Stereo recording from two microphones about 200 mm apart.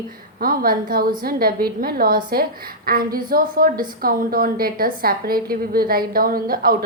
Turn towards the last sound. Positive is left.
turn(degrees=-45)  # may be behind; listen again after turning